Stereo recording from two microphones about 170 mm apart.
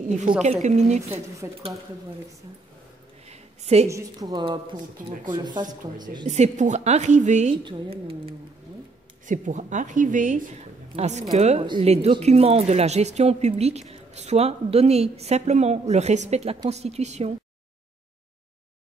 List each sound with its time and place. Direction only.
0.4 s speech: 40° right (ahead or behind)
1.4 s speech: 20° right (ahead or behind)
3.3 s a sound: 40° right (ahead or behind)
3.9 s speech: 25° right (ahead or behind)
6.2 s a woman's voice: 40° right (ahead or behind)
7.5 s speech: 30° right (ahead or behind)
9.2 s a woman's voice: 50° right (ahead or behind)